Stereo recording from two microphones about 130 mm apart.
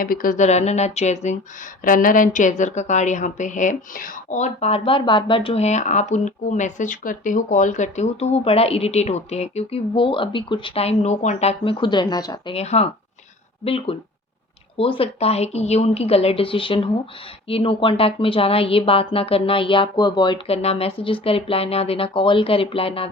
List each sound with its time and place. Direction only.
0.0 s speech: 90° left; by 1.4 s 60° left (ahead or behind)
1.8 s a woman's voice: 90° left; by 5.6 s 40° left (ahead or behind)
5.6 s speech: 65° left (ahead or behind); by 12.5 s 30° left (ahead or behind)
12.5 s a woman's voice: 55° left (ahead or behind); by 20.4 s 35° left (ahead or behind)
20.5 s a woman's voice: 50° left (ahead or behind)